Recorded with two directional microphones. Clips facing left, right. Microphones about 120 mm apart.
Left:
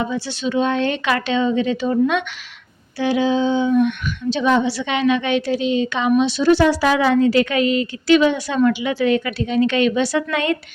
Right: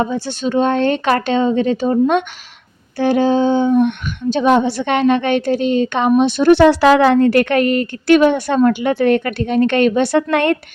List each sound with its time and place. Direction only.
0.0 s a woman's voice: 45° right (ahead or behind)